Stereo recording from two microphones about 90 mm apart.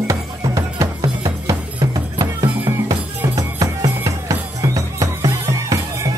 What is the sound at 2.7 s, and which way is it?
Music, 45° right (ahead or behind).